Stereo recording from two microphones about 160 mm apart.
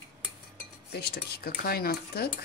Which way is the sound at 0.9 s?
80° left.